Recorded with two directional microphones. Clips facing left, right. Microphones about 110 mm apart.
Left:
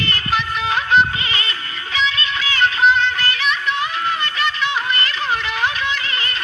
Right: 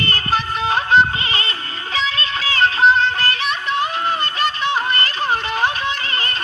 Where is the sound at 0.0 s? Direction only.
35° right (ahead or behind).